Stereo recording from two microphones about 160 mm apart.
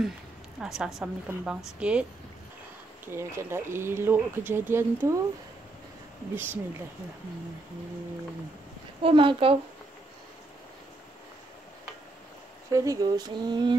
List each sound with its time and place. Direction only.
0.6 s a woman's voice: 5° right (ahead or behind)
3.1 s speech: 15° right (ahead or behind)
6.3 s speech: 15° right (ahead or behind)
9.0 s a woman's voice: 30° right (ahead or behind)
12.7 s speech: 20° right (ahead or behind)